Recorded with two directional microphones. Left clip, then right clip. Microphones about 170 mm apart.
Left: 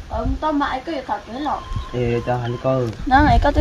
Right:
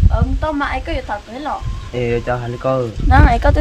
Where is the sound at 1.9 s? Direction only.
5° left (ahead or behind).